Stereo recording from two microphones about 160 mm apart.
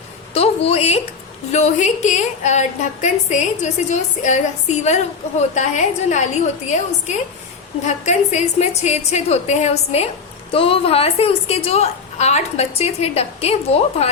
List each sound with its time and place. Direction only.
0.3 s a woman's voice: 40° left (ahead or behind)